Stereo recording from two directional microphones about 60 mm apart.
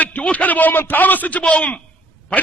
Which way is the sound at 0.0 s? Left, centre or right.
Left.